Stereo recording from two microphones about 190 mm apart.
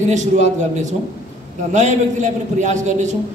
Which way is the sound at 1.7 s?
40° right (ahead or behind).